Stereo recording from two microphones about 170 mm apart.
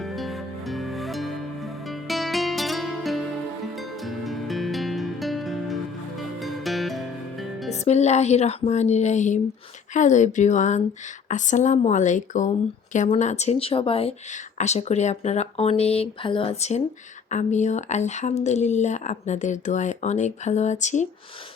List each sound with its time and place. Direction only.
0.0 s music: centre (ahead or behind)
7.7 s speech: 40° left (ahead or behind)